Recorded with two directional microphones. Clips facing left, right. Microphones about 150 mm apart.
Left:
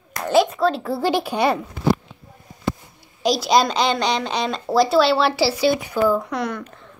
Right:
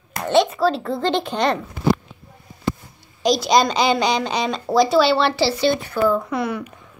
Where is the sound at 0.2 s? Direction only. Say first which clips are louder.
Even; centre (ahead or behind).